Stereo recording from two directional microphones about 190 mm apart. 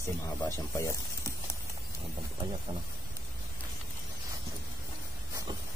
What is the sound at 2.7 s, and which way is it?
Speech, 30° right (ahead or behind).